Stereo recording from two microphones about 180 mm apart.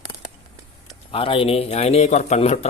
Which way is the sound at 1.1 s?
30° left (ahead or behind).